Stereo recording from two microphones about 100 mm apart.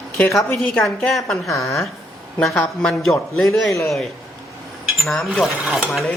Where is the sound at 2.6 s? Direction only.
5° left (ahead or behind).